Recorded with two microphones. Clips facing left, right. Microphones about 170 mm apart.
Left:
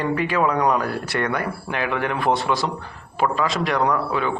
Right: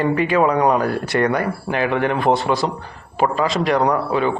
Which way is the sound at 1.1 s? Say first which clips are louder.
Right 6 dB; 50° right (ahead or behind).